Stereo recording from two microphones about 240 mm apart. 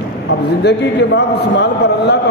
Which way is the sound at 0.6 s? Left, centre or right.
Left.